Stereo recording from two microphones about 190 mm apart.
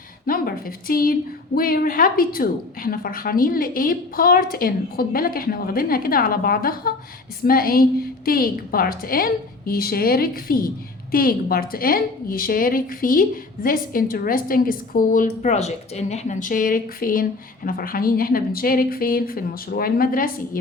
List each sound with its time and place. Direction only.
0.3 s a woman's voice: 50° left (ahead or behind)